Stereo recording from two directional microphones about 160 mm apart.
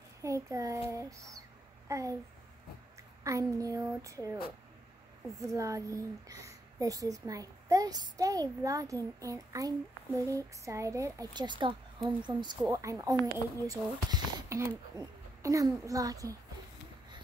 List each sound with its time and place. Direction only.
0.2 s a child's voice: 20° right (ahead or behind)
5.5 s a child's voice: 20° right (ahead or behind)